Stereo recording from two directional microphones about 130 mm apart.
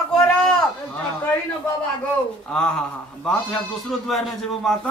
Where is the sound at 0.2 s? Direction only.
5° left (ahead or behind).